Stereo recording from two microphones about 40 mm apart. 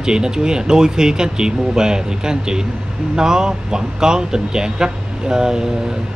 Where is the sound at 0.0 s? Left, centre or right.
Centre.